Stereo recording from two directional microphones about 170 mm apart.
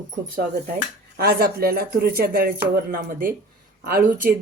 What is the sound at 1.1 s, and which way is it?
Speech, 70° right (ahead or behind).